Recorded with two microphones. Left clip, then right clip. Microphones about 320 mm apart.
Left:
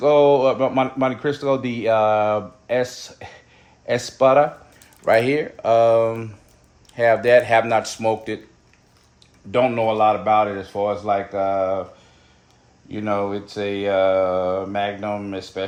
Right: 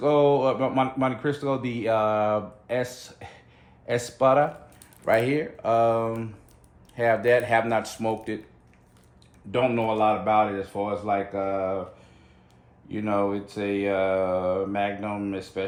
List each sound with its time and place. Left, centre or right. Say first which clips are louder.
0.0 s a man's voice: left 6 dB; left
9.5 s a man's voice: left 5 dB; left
12.9 s a man's voice: left 3 dB; left